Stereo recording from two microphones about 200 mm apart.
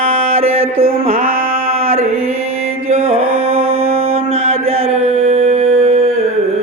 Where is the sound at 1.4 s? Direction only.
30° right (ahead or behind).